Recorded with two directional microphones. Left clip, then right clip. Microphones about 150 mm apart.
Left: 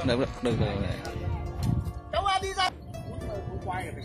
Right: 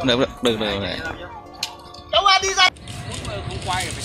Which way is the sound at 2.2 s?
40° right (ahead or behind).